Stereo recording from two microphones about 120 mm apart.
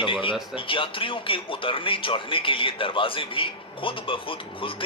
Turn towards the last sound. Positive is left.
turn(degrees=45)  # may be behind; listen again after turning